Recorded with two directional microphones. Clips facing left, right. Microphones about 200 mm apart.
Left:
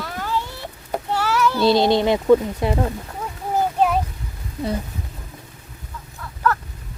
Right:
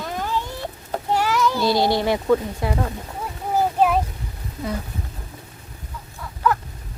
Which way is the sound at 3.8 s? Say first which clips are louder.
Right 1 dB; centre (ahead or behind).